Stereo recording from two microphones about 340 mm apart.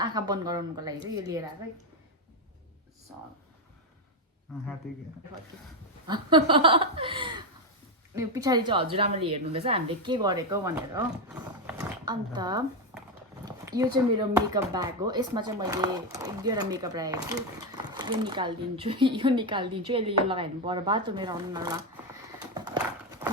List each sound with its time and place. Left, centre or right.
0.0 s speech: centre
6.1 s speech: centre
22.5 s horse: centre